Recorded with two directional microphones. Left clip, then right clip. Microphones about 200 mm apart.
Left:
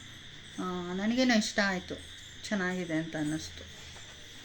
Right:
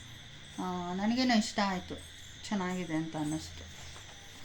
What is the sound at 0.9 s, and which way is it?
Speech, centre (ahead or behind).